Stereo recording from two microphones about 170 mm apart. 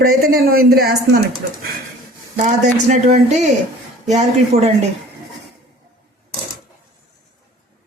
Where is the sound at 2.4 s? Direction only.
40° right (ahead or behind).